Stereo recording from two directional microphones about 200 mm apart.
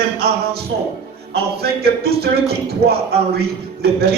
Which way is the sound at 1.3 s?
50° right (ahead or behind).